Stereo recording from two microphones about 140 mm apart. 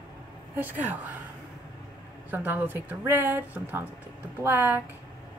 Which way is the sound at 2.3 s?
15° right (ahead or behind).